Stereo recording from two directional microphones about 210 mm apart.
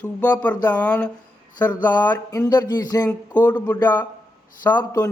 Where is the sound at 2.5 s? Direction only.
20° left (ahead or behind).